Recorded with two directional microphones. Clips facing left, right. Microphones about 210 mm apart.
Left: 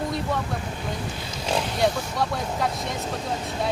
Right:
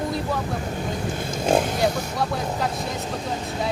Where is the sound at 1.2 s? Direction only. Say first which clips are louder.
Right 8 dB; 50° right (ahead or behind).